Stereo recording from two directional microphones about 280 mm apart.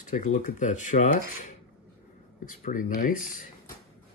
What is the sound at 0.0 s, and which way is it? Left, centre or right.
Speech, left.